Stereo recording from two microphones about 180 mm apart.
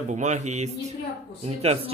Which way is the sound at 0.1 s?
40° right (ahead or behind).